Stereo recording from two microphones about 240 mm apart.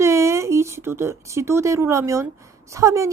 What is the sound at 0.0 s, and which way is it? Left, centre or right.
A woman's voice, centre.